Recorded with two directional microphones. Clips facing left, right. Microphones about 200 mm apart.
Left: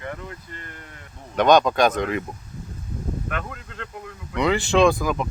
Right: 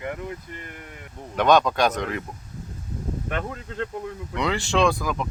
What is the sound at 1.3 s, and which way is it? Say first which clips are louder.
Speech: left 2 dB; centre (ahead or behind).